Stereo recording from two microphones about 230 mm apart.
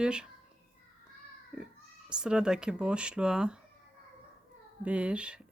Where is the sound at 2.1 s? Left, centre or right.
Centre.